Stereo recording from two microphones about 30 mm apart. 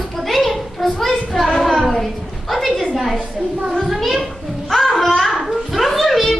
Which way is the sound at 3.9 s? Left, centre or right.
Centre.